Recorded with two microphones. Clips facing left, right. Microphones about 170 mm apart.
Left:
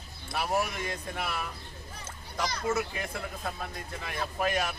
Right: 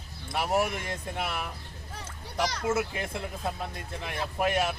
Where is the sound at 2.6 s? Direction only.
25° right (ahead or behind).